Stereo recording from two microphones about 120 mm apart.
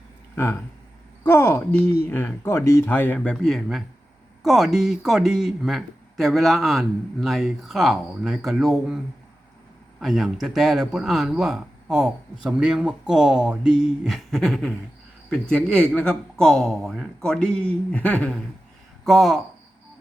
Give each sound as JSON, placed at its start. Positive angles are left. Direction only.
{"t": 0.3, "sound": "speech", "side_deg": 20}
{"t": 3.2, "sound": "speech", "side_deg": 5}
{"t": 10.0, "sound": "speech", "side_deg": 0}